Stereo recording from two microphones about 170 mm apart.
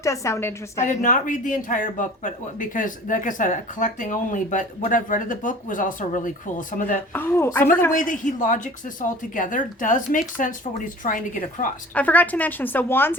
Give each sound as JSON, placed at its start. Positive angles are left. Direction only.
{"t": 0.0, "sound": "a woman's voice", "side_deg": 15}
{"t": 0.8, "sound": "speech", "side_deg": 45}
{"t": 7.1, "sound": "a woman's voice", "side_deg": 10}
{"t": 7.9, "sound": "speech", "side_deg": 50}
{"t": 11.9, "sound": "a woman's voice", "side_deg": 10}